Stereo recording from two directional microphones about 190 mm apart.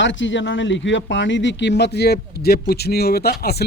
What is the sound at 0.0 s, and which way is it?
Speech, 75° left (ahead or behind).